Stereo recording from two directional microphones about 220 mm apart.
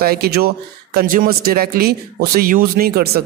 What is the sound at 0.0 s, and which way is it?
Speech, 45° right (ahead or behind).